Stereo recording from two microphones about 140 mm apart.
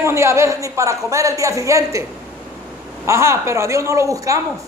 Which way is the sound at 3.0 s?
20° right (ahead or behind).